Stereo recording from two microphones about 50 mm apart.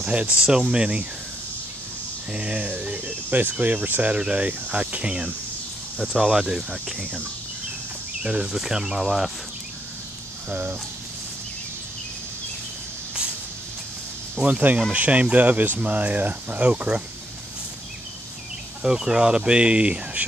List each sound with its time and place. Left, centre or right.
0.0 s speech: right
2.3 s speech: right
2.8 s speech: right
4.2 s speech: right
6.1 s speech: centre
8.2 s speech: right
8.5 s speech: centre
10.5 s speech: right
14.4 s speech: right
18.8 s speech: centre